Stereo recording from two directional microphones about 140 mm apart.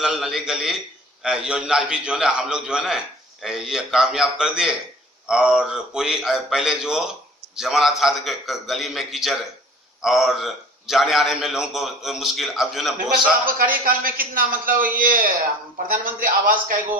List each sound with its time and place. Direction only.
0.0 s a man's voice: 5° right (ahead or behind)
13.4 s a man's voice: 90° right